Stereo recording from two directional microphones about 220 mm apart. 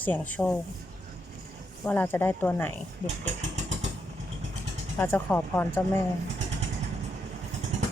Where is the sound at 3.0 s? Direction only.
30° right (ahead or behind).